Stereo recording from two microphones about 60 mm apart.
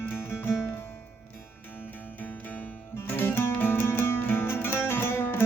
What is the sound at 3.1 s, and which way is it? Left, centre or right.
Music, left.